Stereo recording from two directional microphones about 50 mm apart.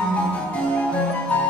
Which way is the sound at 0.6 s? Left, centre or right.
Left.